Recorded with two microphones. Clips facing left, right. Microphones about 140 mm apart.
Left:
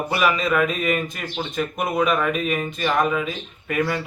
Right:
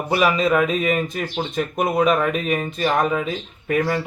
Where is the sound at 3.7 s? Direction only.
35° right (ahead or behind).